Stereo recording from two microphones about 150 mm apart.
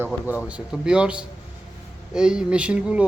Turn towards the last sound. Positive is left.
turn(degrees=-10)  # may be behind; listen again after turning